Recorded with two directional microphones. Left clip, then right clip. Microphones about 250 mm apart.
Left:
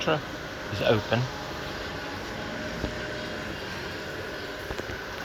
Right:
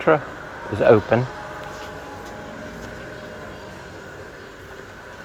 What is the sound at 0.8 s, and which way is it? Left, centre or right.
Speech, right.